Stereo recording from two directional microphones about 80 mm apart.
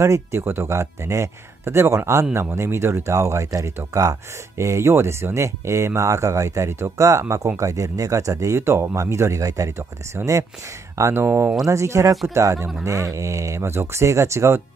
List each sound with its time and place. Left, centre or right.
0.0 s speech: right
11.6 s speech: right